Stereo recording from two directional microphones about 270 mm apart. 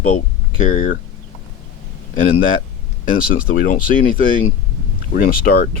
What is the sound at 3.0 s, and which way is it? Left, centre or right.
Speech, left.